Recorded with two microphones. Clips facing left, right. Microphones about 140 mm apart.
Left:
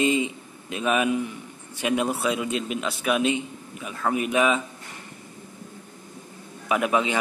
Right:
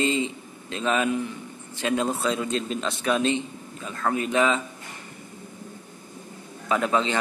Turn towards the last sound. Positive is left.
turn(degrees=10)  # may be behind; listen again after turning